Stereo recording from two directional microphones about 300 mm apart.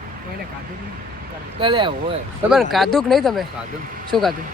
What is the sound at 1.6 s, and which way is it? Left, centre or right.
Speech, centre.